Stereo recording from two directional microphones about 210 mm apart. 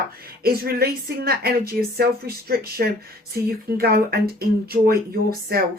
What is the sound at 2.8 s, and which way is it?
A woman's voice, 45° right (ahead or behind).